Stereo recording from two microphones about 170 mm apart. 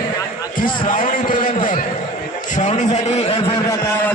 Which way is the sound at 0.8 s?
50° left (ahead or behind).